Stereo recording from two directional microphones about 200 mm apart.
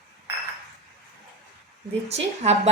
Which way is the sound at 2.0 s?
35° right (ahead or behind).